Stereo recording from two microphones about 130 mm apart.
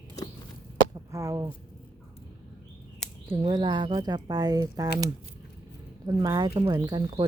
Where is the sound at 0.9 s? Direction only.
25° right (ahead or behind).